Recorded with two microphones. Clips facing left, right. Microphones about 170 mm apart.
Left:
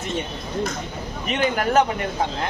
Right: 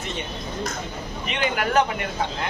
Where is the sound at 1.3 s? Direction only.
40° left (ahead or behind).